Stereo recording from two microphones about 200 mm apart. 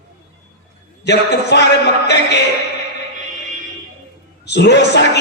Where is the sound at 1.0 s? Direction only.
60° left (ahead or behind).